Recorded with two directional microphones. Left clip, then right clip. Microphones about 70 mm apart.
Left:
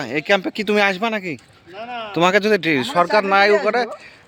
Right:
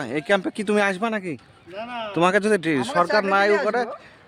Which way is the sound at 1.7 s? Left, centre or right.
Right.